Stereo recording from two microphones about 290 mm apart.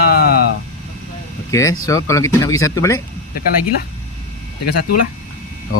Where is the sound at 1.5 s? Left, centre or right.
Centre.